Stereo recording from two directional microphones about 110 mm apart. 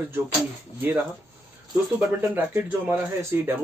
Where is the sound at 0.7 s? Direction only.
15° right (ahead or behind).